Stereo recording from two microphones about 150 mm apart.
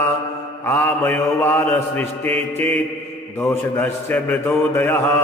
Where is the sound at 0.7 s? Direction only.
15° left (ahead or behind).